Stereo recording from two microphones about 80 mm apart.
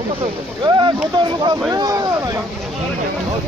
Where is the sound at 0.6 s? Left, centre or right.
Right.